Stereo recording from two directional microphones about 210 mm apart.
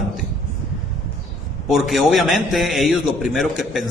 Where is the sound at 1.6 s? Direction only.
Centre (ahead or behind).